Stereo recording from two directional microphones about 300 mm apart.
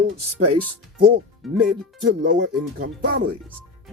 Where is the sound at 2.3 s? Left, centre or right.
Right.